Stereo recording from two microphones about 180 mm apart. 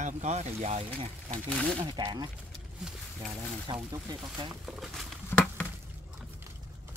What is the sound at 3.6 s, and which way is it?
Speech, 25° right (ahead or behind).